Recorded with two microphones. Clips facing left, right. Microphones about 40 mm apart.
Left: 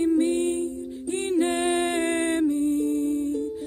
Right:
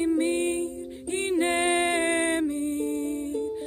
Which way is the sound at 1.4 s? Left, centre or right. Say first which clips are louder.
Even; right.